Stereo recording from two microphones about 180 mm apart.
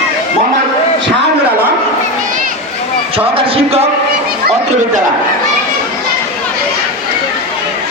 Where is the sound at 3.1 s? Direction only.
30° right (ahead or behind).